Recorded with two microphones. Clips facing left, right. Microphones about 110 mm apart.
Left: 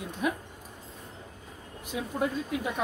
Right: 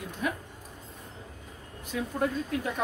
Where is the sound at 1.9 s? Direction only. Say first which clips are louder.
Right 1 dB; 15° left (ahead or behind).